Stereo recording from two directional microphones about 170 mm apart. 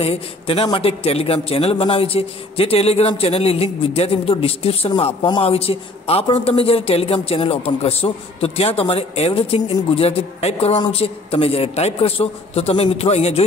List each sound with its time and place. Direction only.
0.0 s a man's voice: 35° left (ahead or behind)